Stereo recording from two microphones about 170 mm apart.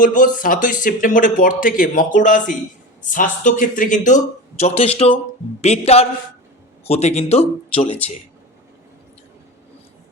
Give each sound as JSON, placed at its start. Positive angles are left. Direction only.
{"t": 0.0, "sound": "speech", "side_deg": 50}